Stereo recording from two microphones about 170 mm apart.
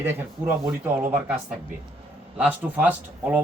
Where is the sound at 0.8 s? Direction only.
10° right (ahead or behind).